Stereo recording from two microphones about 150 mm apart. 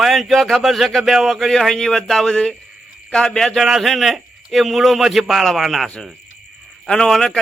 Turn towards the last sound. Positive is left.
turn(degrees=5)  # may be behind; listen again after turning